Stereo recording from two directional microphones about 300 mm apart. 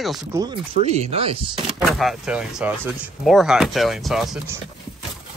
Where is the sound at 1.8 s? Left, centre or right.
Centre.